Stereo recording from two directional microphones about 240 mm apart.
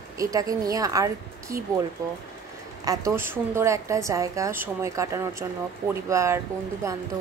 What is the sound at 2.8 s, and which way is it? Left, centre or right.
A woman's voice, centre.